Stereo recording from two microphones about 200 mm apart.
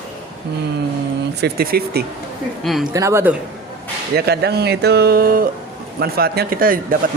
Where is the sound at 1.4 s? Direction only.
50° right (ahead or behind).